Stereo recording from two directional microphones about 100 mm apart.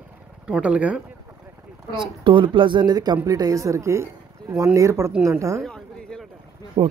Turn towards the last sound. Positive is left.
turn(degrees=-60)  # may be behind; listen again after turning